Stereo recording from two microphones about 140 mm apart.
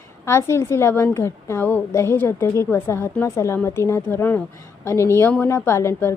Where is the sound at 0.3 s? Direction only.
20° left (ahead or behind).